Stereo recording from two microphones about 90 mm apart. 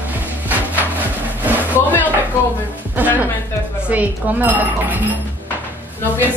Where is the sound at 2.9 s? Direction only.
20° right (ahead or behind).